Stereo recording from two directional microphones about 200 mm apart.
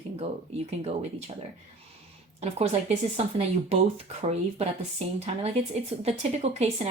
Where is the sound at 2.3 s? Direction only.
30° right (ahead or behind).